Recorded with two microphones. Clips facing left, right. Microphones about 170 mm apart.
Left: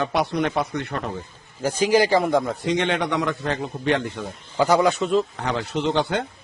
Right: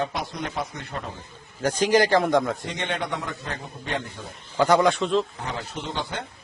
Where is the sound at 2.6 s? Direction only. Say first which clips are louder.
Left 7 dB; 85° left.